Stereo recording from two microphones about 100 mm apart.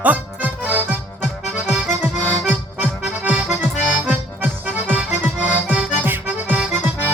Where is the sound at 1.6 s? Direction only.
15° right (ahead or behind).